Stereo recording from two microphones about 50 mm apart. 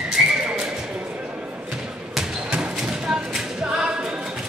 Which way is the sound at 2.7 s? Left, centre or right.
Centre.